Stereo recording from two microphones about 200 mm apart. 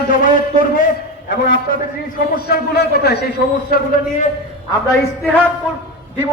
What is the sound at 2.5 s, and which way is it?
A man's voice, 55° left (ahead or behind).